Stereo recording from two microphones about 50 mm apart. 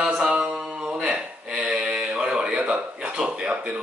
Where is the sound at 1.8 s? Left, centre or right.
Centre.